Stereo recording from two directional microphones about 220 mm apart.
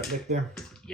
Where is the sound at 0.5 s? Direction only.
5° left (ahead or behind).